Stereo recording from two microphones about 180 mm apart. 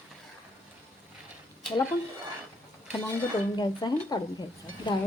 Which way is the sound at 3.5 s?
25° left (ahead or behind).